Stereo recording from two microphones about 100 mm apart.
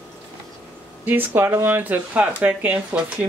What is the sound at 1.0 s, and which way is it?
Speech, 20° right (ahead or behind).